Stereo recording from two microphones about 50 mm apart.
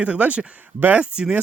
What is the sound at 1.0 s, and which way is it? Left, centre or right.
Speech, centre.